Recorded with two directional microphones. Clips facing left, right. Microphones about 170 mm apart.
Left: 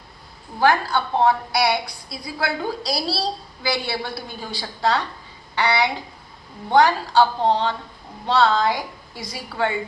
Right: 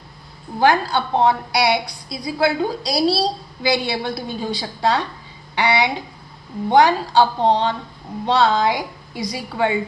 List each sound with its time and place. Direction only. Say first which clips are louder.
0.6 s a woman's voice: right 2 dB; 20° right (ahead or behind)